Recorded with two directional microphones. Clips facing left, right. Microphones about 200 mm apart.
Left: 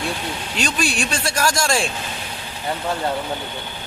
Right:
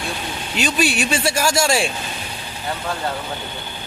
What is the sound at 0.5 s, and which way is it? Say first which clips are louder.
Speech: right 4 dB; 5° right (ahead or behind).